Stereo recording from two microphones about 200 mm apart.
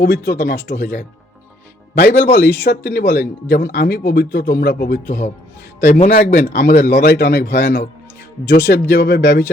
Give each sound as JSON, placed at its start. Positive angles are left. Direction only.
{"t": 0.0, "sound": "speech", "side_deg": 55}
{"t": 0.8, "sound": "a man's voice", "side_deg": 40}
{"t": 6.5, "sound": "speech", "side_deg": 55}